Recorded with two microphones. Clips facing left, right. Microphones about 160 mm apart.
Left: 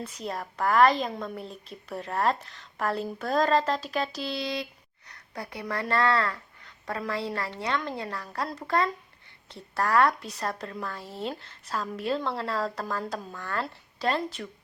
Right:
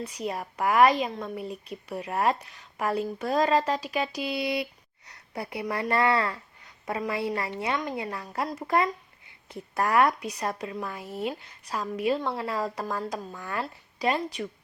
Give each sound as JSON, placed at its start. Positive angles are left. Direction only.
{"t": 0.3, "sound": "a woman's voice", "side_deg": -10}
{"t": 5.3, "sound": "a woman's voice", "side_deg": -20}
{"t": 10.1, "sound": "a woman's voice", "side_deg": 0}